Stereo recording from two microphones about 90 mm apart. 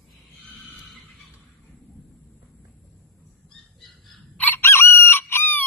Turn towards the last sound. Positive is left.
turn(degrees=25)  # may be behind; listen again after turning